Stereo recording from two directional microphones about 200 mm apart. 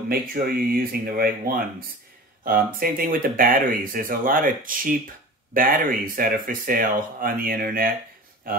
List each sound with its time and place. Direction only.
0.1 s speech: 45° right (ahead or behind)